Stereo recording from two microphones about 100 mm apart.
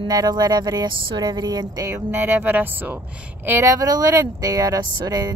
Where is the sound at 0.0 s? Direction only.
45° right (ahead or behind).